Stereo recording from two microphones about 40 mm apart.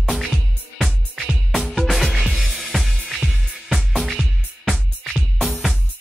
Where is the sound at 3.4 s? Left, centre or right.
Centre.